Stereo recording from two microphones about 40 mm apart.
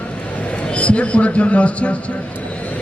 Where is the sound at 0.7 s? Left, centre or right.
Left.